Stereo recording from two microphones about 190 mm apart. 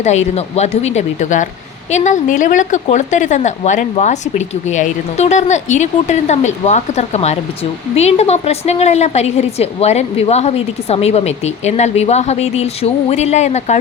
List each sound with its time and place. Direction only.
0.0 s a woman's voice: 35° left (ahead or behind)